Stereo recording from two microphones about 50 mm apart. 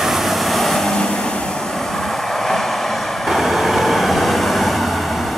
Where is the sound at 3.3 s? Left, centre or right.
Centre.